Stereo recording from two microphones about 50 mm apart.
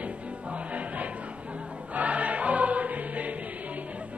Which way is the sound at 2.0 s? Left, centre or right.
Right.